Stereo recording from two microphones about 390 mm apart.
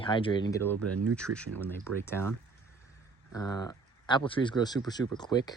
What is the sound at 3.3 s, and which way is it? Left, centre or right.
Speech, centre.